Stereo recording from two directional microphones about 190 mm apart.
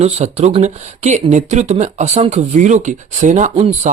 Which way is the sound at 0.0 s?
35° right (ahead or behind).